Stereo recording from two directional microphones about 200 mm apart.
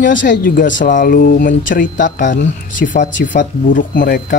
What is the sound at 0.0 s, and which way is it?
Speech, 40° left (ahead or behind).